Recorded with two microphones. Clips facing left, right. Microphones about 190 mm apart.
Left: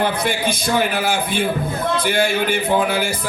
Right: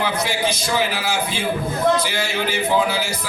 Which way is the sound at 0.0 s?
55° left (ahead or behind).